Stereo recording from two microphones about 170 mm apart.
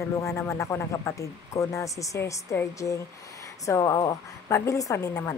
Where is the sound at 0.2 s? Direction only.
15° left (ahead or behind).